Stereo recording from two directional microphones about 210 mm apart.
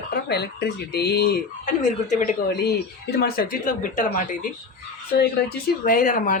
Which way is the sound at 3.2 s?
45° left (ahead or behind).